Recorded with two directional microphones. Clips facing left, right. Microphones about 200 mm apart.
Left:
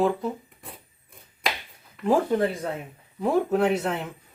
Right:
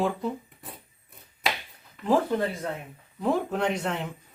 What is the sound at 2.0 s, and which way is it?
Speech, 10° left (ahead or behind).